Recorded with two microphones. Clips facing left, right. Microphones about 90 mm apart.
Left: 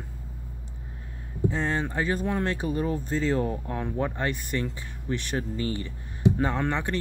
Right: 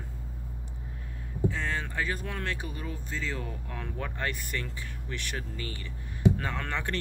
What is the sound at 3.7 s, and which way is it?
Speech, 25° left (ahead or behind).